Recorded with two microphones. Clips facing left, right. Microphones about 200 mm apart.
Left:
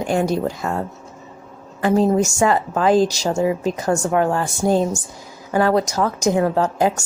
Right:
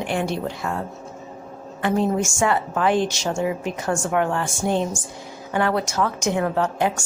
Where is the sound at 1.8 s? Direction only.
35° left (ahead or behind).